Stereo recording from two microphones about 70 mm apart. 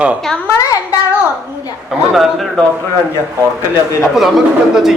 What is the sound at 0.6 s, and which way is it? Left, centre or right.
Speech, left.